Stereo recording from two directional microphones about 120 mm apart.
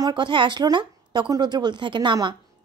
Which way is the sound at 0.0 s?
40° right (ahead or behind).